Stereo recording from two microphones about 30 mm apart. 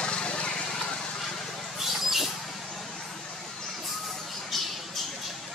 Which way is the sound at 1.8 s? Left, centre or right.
Centre.